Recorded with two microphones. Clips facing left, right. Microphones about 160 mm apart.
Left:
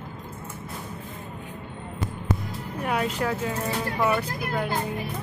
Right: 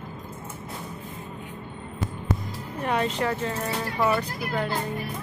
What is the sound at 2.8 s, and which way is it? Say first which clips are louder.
Speech: right 1 dB; 5° left (ahead or behind).